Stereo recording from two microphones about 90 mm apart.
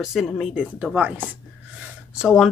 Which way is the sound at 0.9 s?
15° right (ahead or behind).